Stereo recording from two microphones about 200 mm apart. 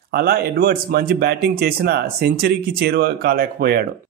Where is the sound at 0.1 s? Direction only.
50° right (ahead or behind).